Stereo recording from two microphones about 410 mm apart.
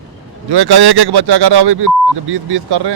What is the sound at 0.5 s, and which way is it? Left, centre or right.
Speech, right.